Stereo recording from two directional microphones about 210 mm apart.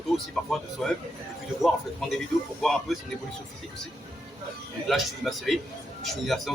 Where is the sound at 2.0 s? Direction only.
Centre (ahead or behind).